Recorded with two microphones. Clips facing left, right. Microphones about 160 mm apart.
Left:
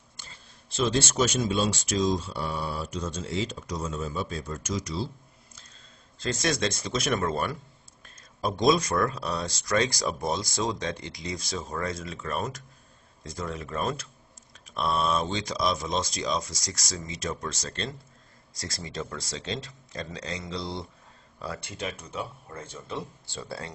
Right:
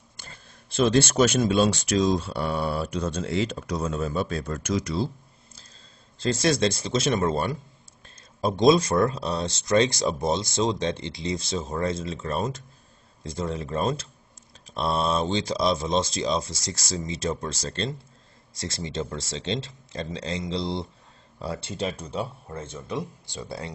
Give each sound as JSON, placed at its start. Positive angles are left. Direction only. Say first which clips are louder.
{"t": 0.2, "sound": "speech", "louder": "right 4 dB", "side_deg": -55}
{"t": 6.1, "sound": "speech", "louder": "right 5 dB", "side_deg": -30}